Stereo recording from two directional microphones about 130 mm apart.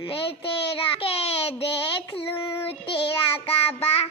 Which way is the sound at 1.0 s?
50° left (ahead or behind).